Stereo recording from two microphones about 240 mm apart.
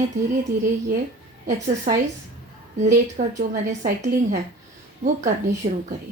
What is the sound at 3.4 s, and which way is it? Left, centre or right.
A woman's voice, right.